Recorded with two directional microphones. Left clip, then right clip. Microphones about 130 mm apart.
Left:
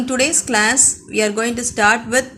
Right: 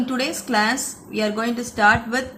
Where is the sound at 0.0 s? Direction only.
35° left (ahead or behind).